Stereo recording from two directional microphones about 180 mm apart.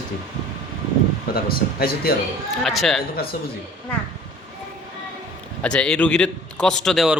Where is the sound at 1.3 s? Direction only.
60° left (ahead or behind).